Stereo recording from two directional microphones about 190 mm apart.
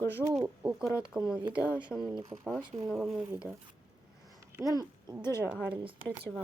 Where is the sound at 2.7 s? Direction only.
5° right (ahead or behind).